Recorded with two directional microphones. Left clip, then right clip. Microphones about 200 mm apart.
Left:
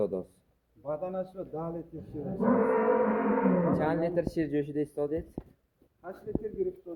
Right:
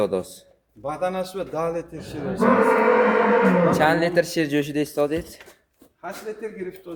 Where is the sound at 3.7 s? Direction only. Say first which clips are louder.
Right 10 dB; 15° right (ahead or behind).